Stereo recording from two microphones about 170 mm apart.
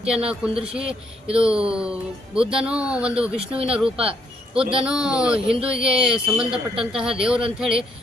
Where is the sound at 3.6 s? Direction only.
35° right (ahead or behind).